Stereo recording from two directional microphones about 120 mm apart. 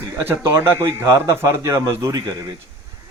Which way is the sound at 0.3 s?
20° right (ahead or behind).